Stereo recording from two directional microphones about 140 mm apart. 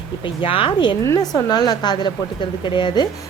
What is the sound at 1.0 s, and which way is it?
A woman's voice, 25° left (ahead or behind).